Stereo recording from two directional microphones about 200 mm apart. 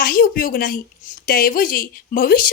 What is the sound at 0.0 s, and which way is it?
Speech, 45° left (ahead or behind).